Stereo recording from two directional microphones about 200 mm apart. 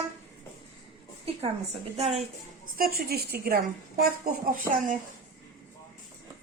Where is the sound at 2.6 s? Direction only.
50° right (ahead or behind).